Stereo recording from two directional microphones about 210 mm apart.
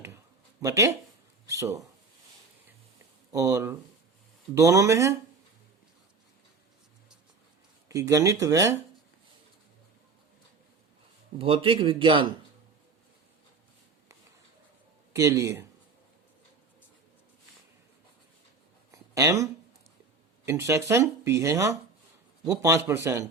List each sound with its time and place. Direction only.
0.6 s speech: 15° right (ahead or behind)
3.3 s speech: 15° right (ahead or behind)
7.9 s speech: 15° right (ahead or behind)
11.3 s a man's voice: 25° right (ahead or behind)
15.1 s speech: 15° right (ahead or behind)
18.9 s a sound: 15° right (ahead or behind)
20.4 s speech: 15° right (ahead or behind)